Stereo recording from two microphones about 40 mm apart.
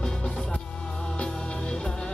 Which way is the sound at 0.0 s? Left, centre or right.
Centre.